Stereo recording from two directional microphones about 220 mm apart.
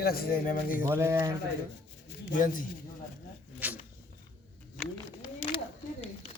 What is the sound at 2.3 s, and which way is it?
Speech, 35° left (ahead or behind).